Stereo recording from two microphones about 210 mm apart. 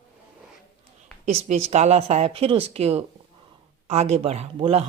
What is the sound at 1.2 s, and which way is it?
Speech, 30° right (ahead or behind).